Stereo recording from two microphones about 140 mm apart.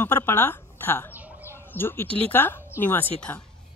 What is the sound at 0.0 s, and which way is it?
Speech, 15° left (ahead or behind).